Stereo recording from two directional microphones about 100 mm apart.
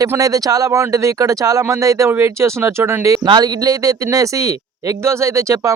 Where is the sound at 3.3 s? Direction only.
45° right (ahead or behind).